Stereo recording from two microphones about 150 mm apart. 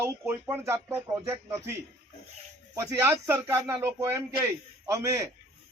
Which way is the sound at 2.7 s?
15° right (ahead or behind).